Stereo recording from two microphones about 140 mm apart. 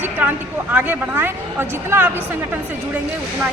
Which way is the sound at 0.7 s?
15° right (ahead or behind).